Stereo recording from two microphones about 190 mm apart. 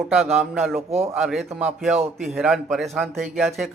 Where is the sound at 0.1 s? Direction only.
5° right (ahead or behind).